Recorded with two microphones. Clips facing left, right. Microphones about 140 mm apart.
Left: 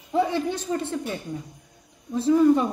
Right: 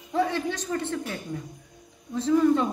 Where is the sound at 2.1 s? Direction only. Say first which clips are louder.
Left 3 dB; 10° left (ahead or behind).